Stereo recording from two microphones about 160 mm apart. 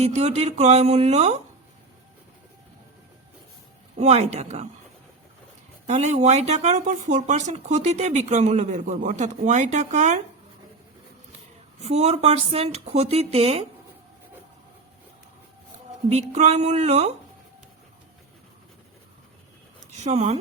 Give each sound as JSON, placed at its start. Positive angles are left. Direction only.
{"t": 0.0, "sound": "a woman's voice", "side_deg": -40}
{"t": 3.9, "sound": "speech", "side_deg": -45}
{"t": 5.8, "sound": "speech", "side_deg": -45}
{"t": 11.8, "sound": "a woman's voice", "side_deg": -40}
{"t": 16.0, "sound": "speech", "side_deg": -45}
{"t": 19.9, "sound": "speech", "side_deg": -45}